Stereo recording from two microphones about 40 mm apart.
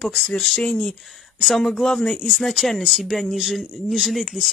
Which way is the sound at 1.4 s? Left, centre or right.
Centre.